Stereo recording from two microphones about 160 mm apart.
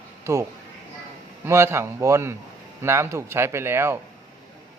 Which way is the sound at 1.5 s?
15° right (ahead or behind).